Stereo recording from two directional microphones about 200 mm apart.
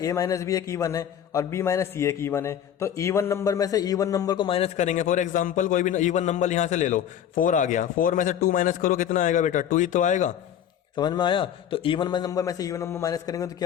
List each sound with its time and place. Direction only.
0.0 s a man's voice: 15° left (ahead or behind); by 10.3 s 40° left (ahead or behind)
10.9 s a man's voice: 20° left (ahead or behind)